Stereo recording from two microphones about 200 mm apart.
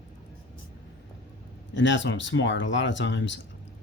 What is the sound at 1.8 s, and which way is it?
Speech, 65° left (ahead or behind).